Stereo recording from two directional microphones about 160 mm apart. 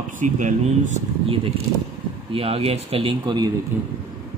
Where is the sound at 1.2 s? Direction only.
35° right (ahead or behind).